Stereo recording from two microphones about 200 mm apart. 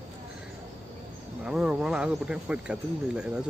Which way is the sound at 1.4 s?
5° right (ahead or behind).